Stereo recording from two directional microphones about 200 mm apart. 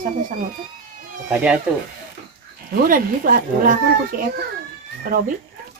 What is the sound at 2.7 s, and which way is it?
Speech, 45° right (ahead or behind).